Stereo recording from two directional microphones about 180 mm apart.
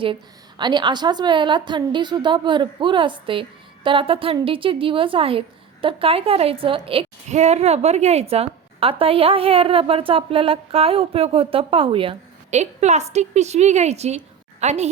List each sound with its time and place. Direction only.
0.6 s a woman's voice: 25° right (ahead or behind)